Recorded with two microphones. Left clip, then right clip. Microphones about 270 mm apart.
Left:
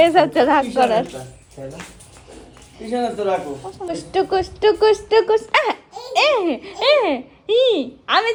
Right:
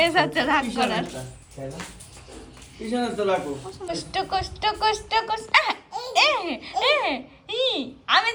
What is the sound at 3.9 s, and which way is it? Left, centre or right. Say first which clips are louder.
Speech: left 6 dB; right.